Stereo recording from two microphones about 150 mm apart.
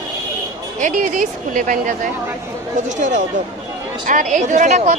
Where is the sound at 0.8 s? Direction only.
60° right (ahead or behind).